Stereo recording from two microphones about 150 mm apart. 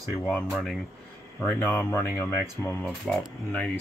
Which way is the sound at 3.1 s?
Centre (ahead or behind).